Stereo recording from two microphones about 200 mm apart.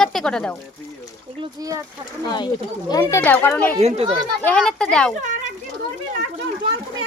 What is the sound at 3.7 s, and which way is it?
Speech, 30° right (ahead or behind).